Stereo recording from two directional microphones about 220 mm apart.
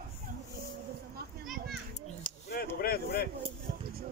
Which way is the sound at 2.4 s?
45° left (ahead or behind).